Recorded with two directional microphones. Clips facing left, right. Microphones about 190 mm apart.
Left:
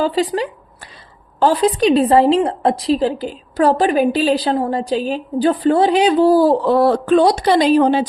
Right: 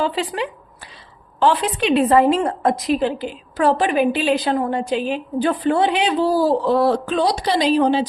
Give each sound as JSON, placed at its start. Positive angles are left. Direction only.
{"t": 0.0, "sound": "a woman's voice", "side_deg": 40}